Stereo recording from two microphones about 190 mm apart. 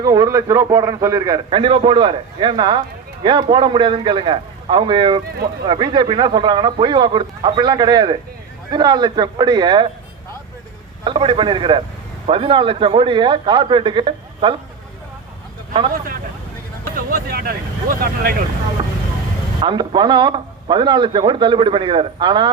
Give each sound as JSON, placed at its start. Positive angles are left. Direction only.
{"t": 0.0, "sound": "a man's voice", "side_deg": -20}
{"t": 11.0, "sound": "a man's voice", "side_deg": -25}
{"t": 16.9, "sound": "speech", "side_deg": -45}
{"t": 19.6, "sound": "a man's voice", "side_deg": -25}